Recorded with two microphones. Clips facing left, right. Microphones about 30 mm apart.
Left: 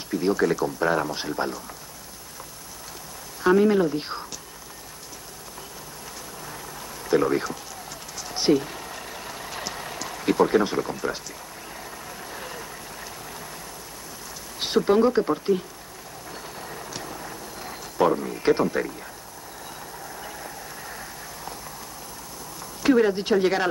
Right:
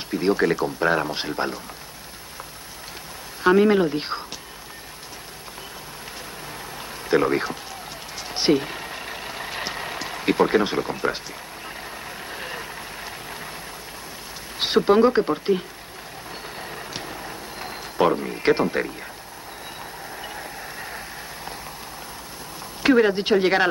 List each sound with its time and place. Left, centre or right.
0.1 s speech: right
3.4 s speech: right
7.1 s speech: right
8.2 s vehicle: right
12.3 s vehicle: right
14.6 s speech: right
16.5 s a sound: right
20.2 s vehicle: right
22.8 s speech: right